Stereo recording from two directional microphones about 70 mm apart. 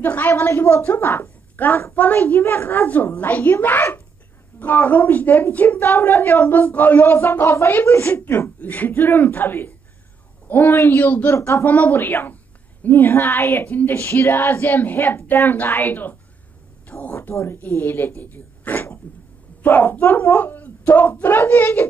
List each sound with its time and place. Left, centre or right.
0.0 s a woman's voice: left
11.3 s a woman's voice: left
11.6 s speech: left
17.1 s speech: left